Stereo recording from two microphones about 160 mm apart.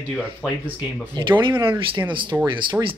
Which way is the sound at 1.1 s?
30° right (ahead or behind).